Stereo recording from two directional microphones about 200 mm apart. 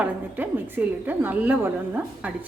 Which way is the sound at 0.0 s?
10° right (ahead or behind).